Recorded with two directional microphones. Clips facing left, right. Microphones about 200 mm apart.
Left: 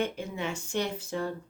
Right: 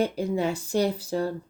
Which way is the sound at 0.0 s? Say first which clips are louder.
Right 7 dB; 35° right (ahead or behind).